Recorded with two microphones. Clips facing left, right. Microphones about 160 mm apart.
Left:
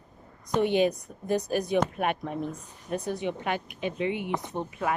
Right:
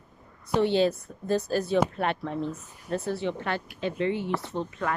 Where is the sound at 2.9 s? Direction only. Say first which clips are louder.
Right 1 dB; 15° left (ahead or behind).